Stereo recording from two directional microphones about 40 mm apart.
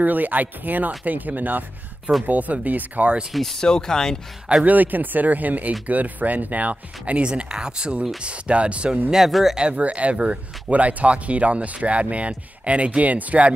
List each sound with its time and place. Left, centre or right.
0.0 s speech: right
3.3 s speech: centre
3.6 s speech: centre
4.6 s speech: right
7.2 s speech: right
9.1 s speech: centre
9.6 s speech: right